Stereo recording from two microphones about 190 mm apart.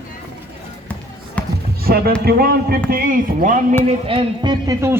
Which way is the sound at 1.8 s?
55° right (ahead or behind).